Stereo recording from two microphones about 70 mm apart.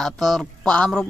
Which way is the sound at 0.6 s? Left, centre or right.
Centre.